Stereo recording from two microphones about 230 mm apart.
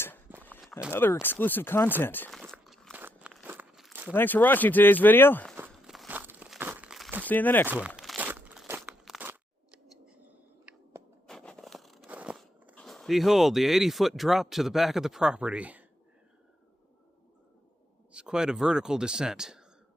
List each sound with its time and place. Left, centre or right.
0.4 s walk: centre
0.9 s a sound: centre
4.1 s speech: centre
5.5 s crumpling: centre
7.3 s speech: centre
7.7 s crunch: centre
10.2 s a sound: centre
12.7 s speech: centre
18.1 s speech: centre